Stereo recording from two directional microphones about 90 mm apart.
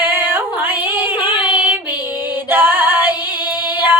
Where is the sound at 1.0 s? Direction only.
65° left (ahead or behind).